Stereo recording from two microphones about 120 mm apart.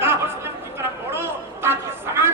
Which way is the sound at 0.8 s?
20° right (ahead or behind).